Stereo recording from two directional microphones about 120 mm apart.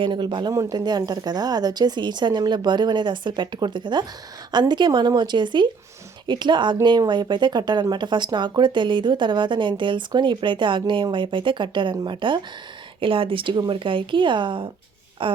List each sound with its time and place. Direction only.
0.0 s speech: 40° right (ahead or behind)